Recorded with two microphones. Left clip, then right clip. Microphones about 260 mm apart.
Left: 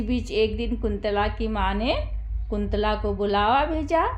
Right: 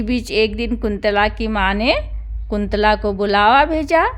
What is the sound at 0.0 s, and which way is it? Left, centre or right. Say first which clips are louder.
A woman's voice: right 6 dB; right.